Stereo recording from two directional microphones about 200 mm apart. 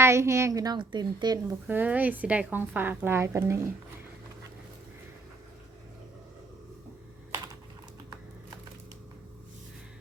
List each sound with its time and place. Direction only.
0.0 s a woman's voice: 15° right (ahead or behind)
1.6 s a woman's voice: 10° right (ahead or behind)
7.3 s typing: 15° right (ahead or behind)